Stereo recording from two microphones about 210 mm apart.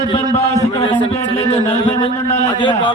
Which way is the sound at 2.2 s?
15° left (ahead or behind).